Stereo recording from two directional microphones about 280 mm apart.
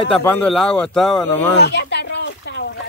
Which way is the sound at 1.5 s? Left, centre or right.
Left.